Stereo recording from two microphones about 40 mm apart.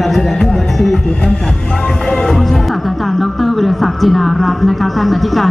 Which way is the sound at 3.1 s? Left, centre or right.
Centre.